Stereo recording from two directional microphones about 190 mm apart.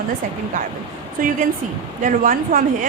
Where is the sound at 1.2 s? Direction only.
45° right (ahead or behind).